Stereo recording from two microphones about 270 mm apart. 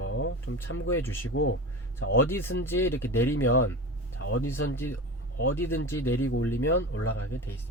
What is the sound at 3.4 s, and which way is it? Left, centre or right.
Speech, left.